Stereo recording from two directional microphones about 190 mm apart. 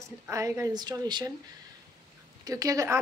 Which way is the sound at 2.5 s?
15° right (ahead or behind).